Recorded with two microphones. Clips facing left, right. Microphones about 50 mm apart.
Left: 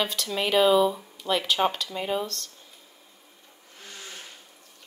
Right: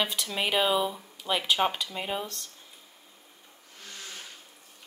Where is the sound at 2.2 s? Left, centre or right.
Centre.